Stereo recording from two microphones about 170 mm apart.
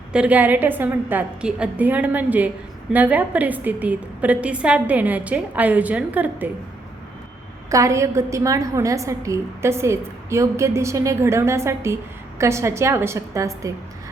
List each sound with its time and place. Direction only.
0.1 s a woman's voice: 5° right (ahead or behind)
7.7 s a woman's voice: 20° right (ahead or behind)